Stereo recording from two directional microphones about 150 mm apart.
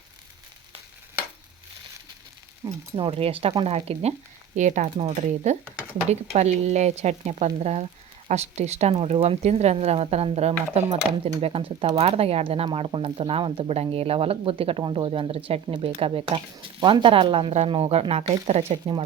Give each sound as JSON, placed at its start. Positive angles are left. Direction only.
{"t": 2.9, "sound": "speech", "side_deg": -40}
{"t": 4.5, "sound": "speech", "side_deg": -55}